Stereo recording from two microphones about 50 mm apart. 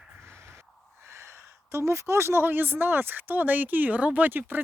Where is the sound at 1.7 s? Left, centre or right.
Right.